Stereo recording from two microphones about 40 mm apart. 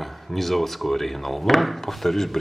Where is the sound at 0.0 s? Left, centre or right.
Centre.